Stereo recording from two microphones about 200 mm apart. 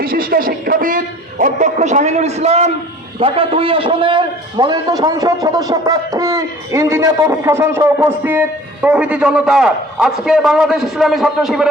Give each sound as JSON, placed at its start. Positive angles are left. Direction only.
{"t": 0.0, "sound": "a man's voice", "side_deg": -45}